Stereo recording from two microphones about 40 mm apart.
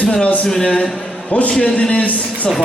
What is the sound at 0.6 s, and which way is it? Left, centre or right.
A man's voice, left.